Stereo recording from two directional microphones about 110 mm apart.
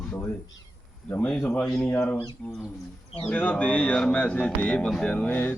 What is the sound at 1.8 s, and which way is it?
Speech, 15° left (ahead or behind).